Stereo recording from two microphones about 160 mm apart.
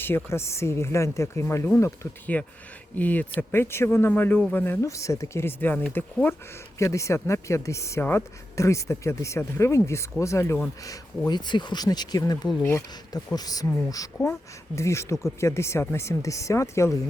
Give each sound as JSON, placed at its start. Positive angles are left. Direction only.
{"t": 0.3, "sound": "speech", "side_deg": 15}
{"t": 11.3, "sound": "speech", "side_deg": 25}